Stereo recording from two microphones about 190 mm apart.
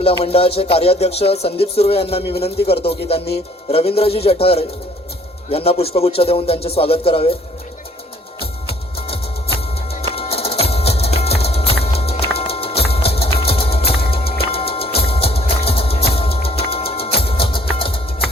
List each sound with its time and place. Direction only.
0.0 s speech: 30° left (ahead or behind)
9.0 s music: 30° left (ahead or behind)
12.4 s clip-clop: 30° left (ahead or behind)
13.9 s music: 30° left (ahead or behind)